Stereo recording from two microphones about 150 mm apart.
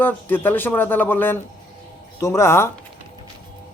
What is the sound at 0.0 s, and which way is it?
Speech, 15° left (ahead or behind).